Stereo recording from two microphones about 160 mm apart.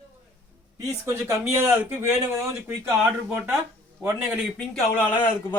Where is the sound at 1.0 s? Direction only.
20° right (ahead or behind).